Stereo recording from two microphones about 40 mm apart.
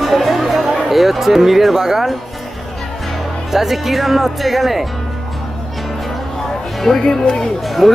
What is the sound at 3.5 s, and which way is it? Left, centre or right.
Speech, centre.